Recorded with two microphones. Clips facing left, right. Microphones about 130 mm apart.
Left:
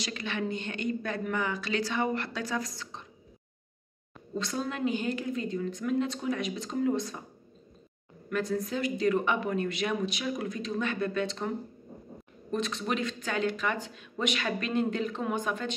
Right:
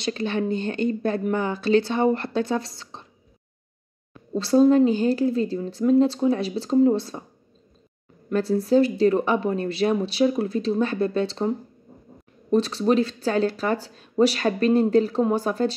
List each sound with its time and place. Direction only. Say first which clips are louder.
0.0 s speech: right 8 dB; 30° right (ahead or behind)
4.3 s speech: right 16 dB; 35° right (ahead or behind)
8.3 s speech: right 10 dB; 30° right (ahead or behind)